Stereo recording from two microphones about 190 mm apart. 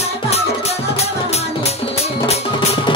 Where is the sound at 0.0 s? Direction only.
35° left (ahead or behind).